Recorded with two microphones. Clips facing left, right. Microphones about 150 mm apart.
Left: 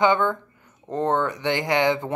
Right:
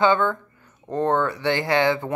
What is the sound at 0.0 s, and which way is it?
Speech, 15° left (ahead or behind).